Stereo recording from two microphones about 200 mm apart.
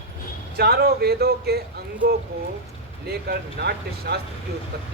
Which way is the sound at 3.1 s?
55° right (ahead or behind).